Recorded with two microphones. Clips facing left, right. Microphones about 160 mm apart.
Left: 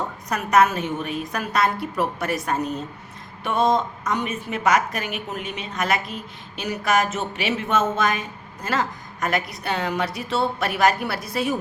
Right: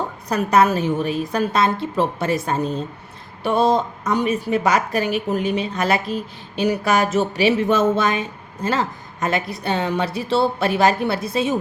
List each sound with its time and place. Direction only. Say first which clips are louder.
0.3 s a woman's voice: right 2 dB; 30° right (ahead or behind)